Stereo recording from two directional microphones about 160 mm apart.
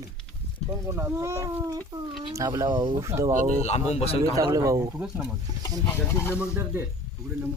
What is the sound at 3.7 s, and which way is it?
Speech, 45° left (ahead or behind).